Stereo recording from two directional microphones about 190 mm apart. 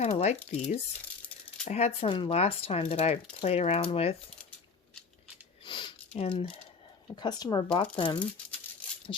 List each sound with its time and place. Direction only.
0.0 s speech: 35° left (ahead or behind)
5.6 s a sound: 25° left (ahead or behind)
7.2 s speech: 20° left (ahead or behind)